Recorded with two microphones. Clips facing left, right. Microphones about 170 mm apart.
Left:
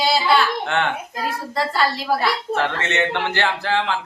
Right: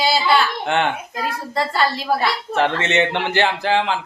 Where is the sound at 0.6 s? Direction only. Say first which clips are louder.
Right 2 dB; 15° right (ahead or behind).